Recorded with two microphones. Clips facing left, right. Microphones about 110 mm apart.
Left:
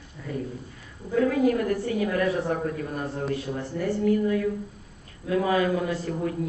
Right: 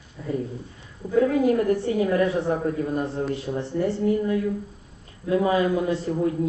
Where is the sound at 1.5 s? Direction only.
25° right (ahead or behind).